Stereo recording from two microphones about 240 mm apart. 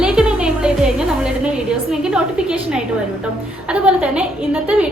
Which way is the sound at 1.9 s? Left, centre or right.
Centre.